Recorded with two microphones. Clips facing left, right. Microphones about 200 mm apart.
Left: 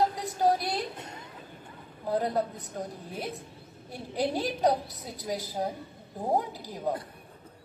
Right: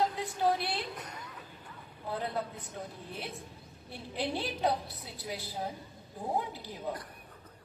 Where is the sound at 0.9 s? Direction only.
25° left (ahead or behind).